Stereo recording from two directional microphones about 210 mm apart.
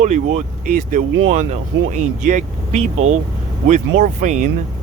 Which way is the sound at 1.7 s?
60° right (ahead or behind).